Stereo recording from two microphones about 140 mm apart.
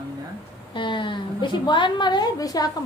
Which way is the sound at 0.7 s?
35° left (ahead or behind).